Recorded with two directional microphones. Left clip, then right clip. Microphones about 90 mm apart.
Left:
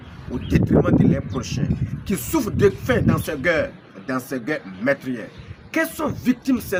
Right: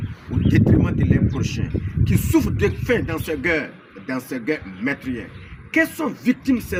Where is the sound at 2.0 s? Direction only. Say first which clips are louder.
Right 3 dB; 50° left (ahead or behind).